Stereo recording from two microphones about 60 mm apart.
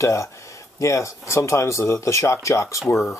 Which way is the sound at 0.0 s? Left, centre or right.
Left.